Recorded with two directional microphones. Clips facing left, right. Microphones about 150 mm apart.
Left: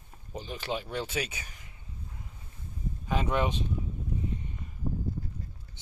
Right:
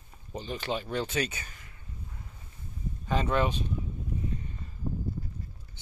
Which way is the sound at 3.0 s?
10° left (ahead or behind).